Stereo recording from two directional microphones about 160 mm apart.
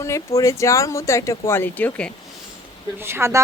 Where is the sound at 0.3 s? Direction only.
20° left (ahead or behind).